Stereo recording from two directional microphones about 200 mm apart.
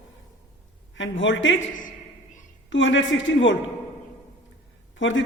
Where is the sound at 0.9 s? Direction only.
70° left (ahead or behind).